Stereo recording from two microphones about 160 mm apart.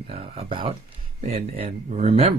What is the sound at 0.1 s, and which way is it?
Speech, 35° right (ahead or behind).